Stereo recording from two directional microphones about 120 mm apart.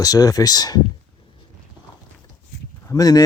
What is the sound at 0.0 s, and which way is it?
Speech, 30° left (ahead or behind).